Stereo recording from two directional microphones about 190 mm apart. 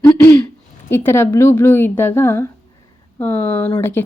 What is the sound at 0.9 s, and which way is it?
Speech, 10° left (ahead or behind).